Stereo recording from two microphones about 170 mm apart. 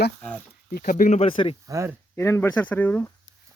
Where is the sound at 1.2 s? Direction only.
30° left (ahead or behind).